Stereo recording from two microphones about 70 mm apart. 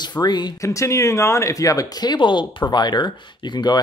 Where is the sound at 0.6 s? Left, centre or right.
Left.